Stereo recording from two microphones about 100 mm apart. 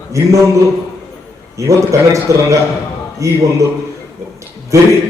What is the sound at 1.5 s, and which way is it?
A man's voice, 30° right (ahead or behind).